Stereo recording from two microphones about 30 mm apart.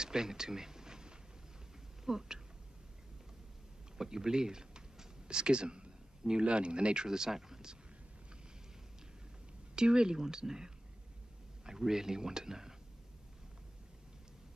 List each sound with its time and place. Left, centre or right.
0.0 s a sound: right
2.0 s speech: centre
4.0 s speech: centre
7.1 s speech: centre
9.8 s speech: right